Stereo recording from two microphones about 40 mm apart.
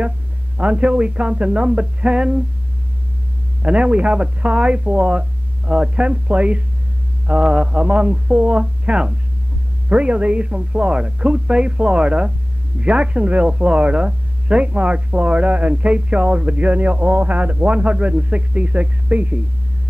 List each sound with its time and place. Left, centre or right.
0.6 s a man's voice: right
3.6 s a man's voice: right